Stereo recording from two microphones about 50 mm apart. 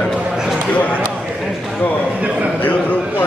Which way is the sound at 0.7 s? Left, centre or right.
Left.